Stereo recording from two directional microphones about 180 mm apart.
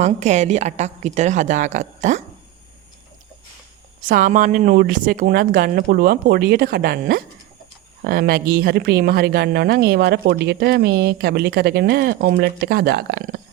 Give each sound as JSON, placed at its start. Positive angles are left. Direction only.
{"t": 0.0, "sound": "a woman's voice", "side_deg": -40}
{"t": 4.0, "sound": "speech", "side_deg": -50}